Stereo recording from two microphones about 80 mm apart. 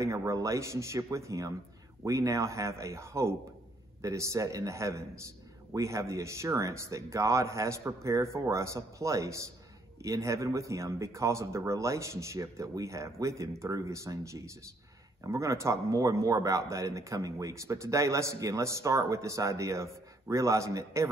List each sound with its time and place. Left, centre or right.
0.0 s a man's voice: right